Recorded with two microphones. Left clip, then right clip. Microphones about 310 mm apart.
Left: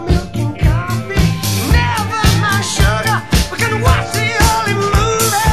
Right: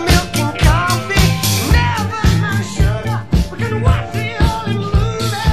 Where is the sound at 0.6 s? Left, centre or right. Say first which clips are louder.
Right 6 dB; right.